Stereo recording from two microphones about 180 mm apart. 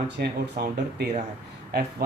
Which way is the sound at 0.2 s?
60° right (ahead or behind).